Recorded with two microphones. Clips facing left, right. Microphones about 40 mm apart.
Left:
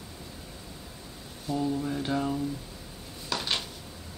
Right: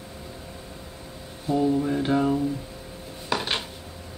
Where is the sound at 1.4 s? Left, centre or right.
Right.